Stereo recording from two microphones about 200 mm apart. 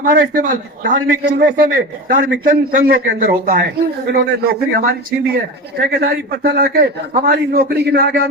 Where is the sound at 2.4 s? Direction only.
45° right (ahead or behind).